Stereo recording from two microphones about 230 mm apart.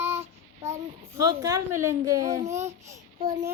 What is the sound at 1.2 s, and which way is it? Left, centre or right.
Speech, centre.